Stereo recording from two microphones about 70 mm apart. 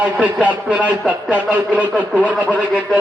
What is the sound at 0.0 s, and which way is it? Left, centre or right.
Speech, centre.